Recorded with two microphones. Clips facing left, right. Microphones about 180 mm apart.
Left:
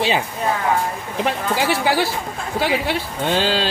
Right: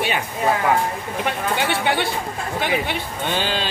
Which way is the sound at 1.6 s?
25° right (ahead or behind).